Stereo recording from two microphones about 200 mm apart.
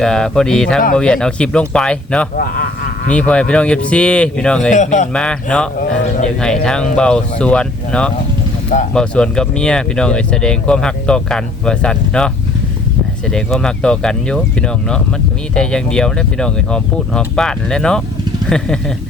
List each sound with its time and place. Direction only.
0.0 s speech: 5° left (ahead or behind)
2.3 s speech: 45° left (ahead or behind)
3.1 s speech: 5° left (ahead or behind)
4.7 s speech: 35° left (ahead or behind)
5.1 s speech: 5° left (ahead or behind)
13.3 s speech: 5° left (ahead or behind)